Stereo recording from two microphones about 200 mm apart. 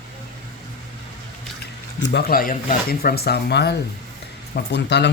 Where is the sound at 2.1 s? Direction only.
45° left (ahead or behind).